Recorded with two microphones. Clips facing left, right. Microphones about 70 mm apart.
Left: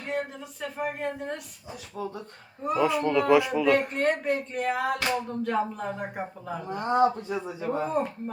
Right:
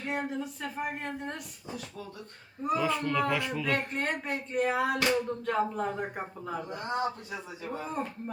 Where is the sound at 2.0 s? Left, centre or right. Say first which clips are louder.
Left 8 dB; left.